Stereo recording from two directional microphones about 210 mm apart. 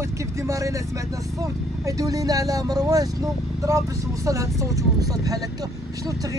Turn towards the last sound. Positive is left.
turn(degrees=-15)  # may be behind; listen again after turning